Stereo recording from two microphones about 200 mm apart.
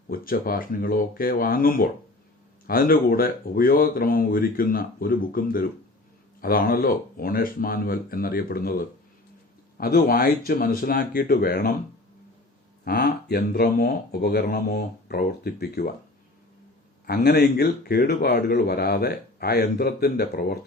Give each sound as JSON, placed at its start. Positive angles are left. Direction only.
{"t": 0.1, "sound": "speech", "side_deg": 45}
{"t": 12.8, "sound": "speech", "side_deg": 50}
{"t": 17.1, "sound": "speech", "side_deg": 50}